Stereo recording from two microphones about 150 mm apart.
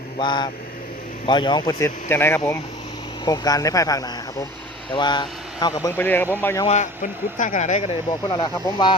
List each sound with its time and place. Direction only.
0.2 s speech: 30° left (ahead or behind)
2.0 s speech: 15° left (ahead or behind)
6.0 s speech: 10° left (ahead or behind)
6.7 s speech: 55° left (ahead or behind)
8.3 s speech: 30° left (ahead or behind)